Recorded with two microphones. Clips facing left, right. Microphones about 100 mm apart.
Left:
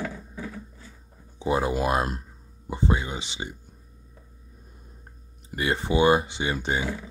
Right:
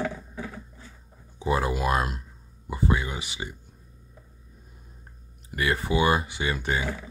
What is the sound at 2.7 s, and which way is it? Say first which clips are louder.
Speech: even; 25° left (ahead or behind).